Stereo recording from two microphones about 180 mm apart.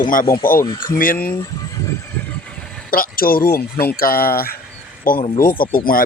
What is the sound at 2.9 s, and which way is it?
Speech, 55° left (ahead or behind).